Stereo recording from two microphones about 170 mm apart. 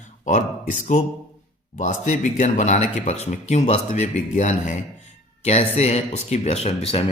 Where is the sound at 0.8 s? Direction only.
45° left (ahead or behind).